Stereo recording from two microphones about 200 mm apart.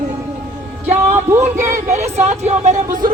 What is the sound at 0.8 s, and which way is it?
Speech, 10° right (ahead or behind).